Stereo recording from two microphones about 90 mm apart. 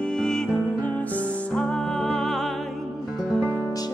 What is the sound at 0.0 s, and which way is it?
Music, 10° left (ahead or behind).